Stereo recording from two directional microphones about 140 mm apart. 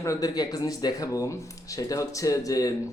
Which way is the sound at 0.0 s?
25° left (ahead or behind).